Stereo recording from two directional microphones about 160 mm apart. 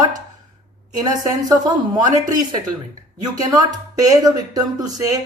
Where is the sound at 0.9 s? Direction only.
25° right (ahead or behind).